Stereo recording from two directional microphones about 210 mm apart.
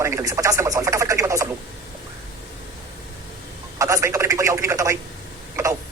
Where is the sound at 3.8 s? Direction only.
15° right (ahead or behind).